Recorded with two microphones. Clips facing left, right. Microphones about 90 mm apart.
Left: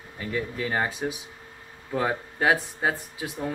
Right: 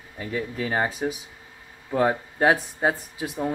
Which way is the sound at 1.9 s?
20° right (ahead or behind).